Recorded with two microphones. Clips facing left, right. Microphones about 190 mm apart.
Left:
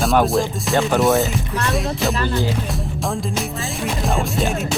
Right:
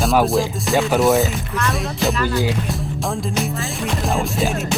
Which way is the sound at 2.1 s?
25° left (ahead or behind).